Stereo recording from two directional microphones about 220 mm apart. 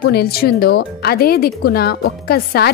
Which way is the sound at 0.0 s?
45° left (ahead or behind).